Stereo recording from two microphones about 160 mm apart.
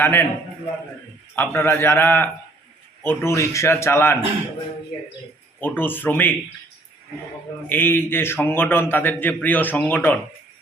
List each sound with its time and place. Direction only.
0.0 s a man's voice: 15° left (ahead or behind)
1.4 s a man's voice: 15° left (ahead or behind)
5.5 s a man's voice: 10° left (ahead or behind)
7.7 s a man's voice: 10° left (ahead or behind)